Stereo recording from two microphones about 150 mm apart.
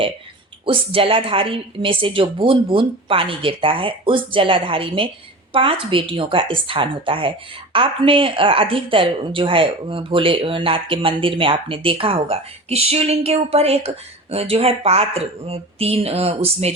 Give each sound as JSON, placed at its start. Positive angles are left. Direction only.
{"t": 0.6, "sound": "a woman's voice", "side_deg": -35}